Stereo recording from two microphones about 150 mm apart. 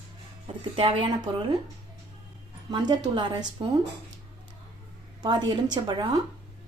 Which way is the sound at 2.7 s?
30° right (ahead or behind).